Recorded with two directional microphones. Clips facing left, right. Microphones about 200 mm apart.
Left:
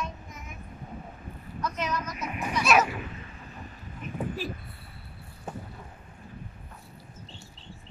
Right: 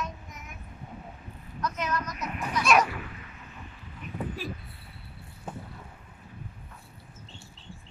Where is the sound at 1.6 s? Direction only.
Centre (ahead or behind).